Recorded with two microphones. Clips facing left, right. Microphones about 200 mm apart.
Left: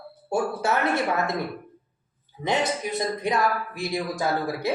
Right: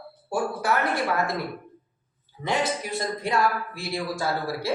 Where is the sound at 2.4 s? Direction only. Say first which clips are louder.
Left 1 dB; 20° left (ahead or behind).